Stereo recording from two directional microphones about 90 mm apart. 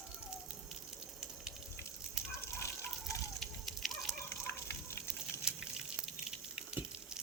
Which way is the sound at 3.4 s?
Centre (ahead or behind).